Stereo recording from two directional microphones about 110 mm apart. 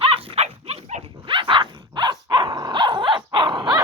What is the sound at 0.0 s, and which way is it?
Dog, 55° right (ahead or behind).